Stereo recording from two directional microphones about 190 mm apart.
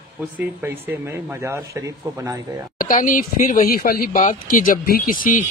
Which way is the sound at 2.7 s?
45° left (ahead or behind).